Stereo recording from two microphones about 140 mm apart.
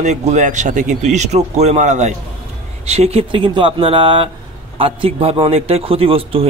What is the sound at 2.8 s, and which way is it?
A man's voice, 50° right (ahead or behind).